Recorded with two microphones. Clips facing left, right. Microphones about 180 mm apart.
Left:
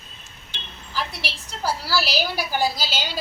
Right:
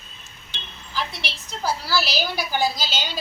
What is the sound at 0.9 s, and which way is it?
A woman's voice, 10° left (ahead or behind).